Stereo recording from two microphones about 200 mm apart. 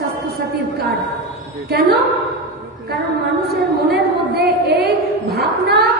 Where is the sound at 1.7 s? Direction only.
50° right (ahead or behind).